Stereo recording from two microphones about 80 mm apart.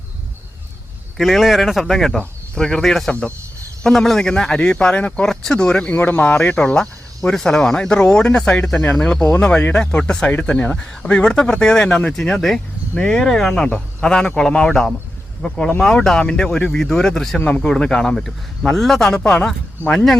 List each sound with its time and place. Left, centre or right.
1.2 s speech: centre
17.4 s speech: centre
17.7 s speech: centre
19.8 s speech: right